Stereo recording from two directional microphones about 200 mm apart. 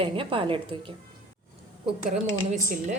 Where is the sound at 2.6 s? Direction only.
40° right (ahead or behind).